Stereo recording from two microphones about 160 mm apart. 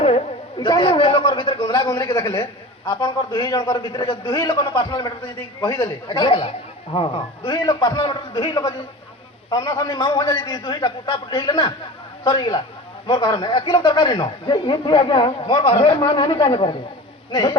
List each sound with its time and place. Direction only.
0.6 s speech: 30° left (ahead or behind)